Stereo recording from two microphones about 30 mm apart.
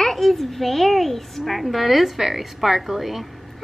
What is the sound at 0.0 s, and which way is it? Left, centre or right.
A child's voice, centre.